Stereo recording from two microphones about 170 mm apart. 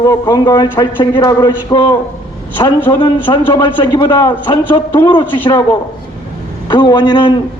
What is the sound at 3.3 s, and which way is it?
A man's voice, 25° left (ahead or behind).